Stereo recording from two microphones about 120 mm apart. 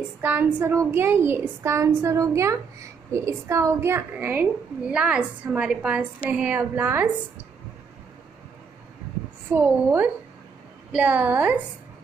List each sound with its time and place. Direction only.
0.2 s a woman's voice: 15° right (ahead or behind)
9.5 s a woman's voice: 15° right (ahead or behind)